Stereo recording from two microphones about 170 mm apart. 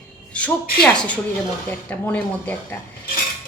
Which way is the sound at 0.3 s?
10° left (ahead or behind).